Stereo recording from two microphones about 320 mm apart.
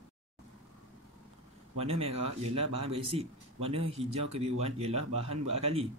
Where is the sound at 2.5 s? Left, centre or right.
Centre.